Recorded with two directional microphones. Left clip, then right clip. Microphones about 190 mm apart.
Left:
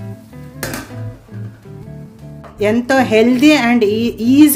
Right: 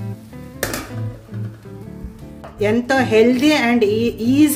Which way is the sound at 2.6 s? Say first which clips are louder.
Left 3 dB; 25° left (ahead or behind).